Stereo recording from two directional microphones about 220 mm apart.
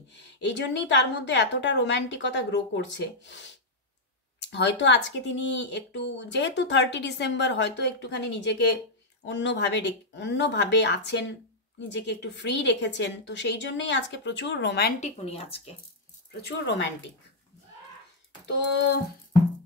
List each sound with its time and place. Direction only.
0.1 s speech: 50° left (ahead or behind)
15.0 s speech: 30° left (ahead or behind)
16.3 s speech: 50° left (ahead or behind)